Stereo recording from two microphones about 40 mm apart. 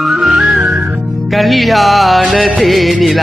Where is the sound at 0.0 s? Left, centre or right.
Centre.